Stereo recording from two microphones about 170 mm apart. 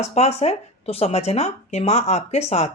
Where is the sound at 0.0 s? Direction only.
40° left (ahead or behind).